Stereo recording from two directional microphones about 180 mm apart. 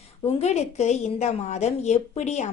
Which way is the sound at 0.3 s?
40° left (ahead or behind).